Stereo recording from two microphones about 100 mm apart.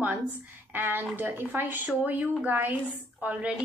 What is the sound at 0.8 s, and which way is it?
A woman's voice, 20° right (ahead or behind).